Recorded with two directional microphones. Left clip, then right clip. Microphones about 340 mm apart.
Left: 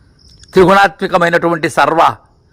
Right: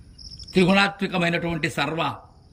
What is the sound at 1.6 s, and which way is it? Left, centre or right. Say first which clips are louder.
Speech: left 14 dB; centre.